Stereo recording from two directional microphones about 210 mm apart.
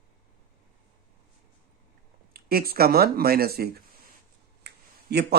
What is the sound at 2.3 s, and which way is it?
Speech, 45° right (ahead or behind).